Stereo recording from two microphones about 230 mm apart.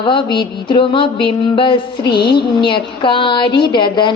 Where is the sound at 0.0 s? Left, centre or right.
Left.